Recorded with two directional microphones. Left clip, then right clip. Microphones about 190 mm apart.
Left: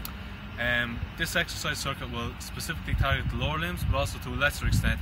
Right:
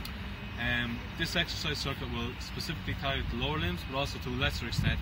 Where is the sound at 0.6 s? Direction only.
25° left (ahead or behind).